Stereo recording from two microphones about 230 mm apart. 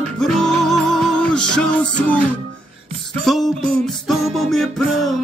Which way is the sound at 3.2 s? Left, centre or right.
Centre.